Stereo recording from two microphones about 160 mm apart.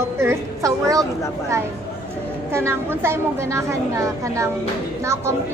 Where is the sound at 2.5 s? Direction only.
15° right (ahead or behind).